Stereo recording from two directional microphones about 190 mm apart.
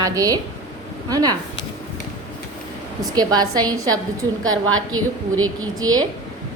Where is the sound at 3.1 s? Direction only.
20° right (ahead or behind).